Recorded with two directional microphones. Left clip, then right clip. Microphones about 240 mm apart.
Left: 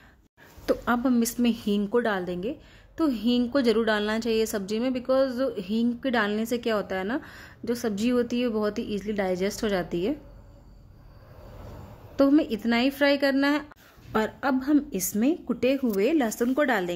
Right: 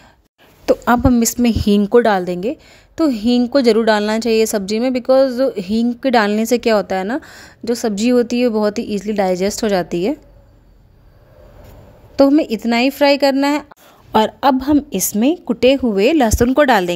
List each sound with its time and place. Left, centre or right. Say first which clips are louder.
0.7 s a woman's voice: right 11 dB; right
12.2 s a woman's voice: right 9 dB; right